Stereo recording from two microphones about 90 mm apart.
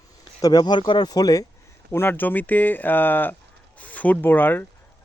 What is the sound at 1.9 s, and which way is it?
Speech, 20° left (ahead or behind).